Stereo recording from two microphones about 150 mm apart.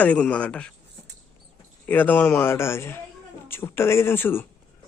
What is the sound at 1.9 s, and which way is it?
A man's voice, 10° left (ahead or behind).